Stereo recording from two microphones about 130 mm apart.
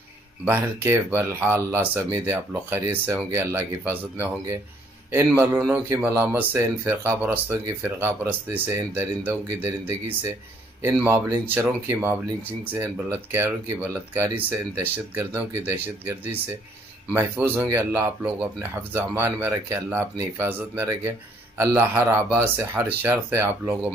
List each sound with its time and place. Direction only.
0.5 s speech: 15° right (ahead or behind)
17.1 s speech: 15° right (ahead or behind)